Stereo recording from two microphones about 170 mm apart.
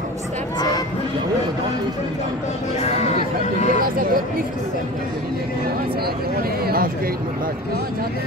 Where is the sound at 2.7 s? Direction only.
40° left (ahead or behind).